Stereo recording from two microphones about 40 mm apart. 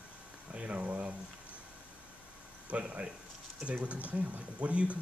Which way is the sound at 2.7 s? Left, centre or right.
Right.